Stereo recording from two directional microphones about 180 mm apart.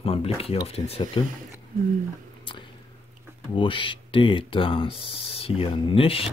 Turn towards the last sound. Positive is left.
turn(degrees=30)  # may be behind; listen again after turning